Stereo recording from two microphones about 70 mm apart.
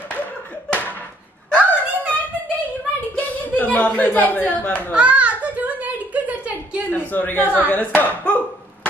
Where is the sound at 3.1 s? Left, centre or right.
Left.